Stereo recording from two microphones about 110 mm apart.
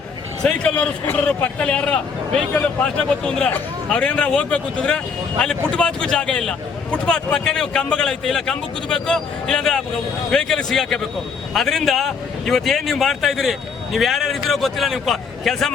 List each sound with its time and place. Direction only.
0.4 s a man's voice: 10° left (ahead or behind)